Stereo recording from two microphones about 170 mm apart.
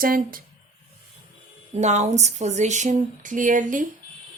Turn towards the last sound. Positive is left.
turn(degrees=-50)  # may be behind; listen again after turning